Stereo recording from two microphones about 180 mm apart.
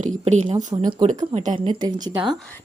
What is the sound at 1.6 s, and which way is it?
Speech, 25° right (ahead or behind).